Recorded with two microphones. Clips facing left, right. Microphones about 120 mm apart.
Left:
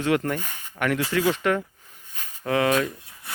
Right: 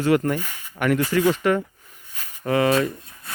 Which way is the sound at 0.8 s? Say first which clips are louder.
Right 4 dB; centre (ahead or behind).